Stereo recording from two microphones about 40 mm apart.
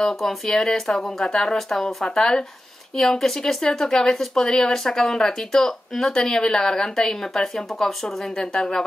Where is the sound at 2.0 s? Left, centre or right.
Centre.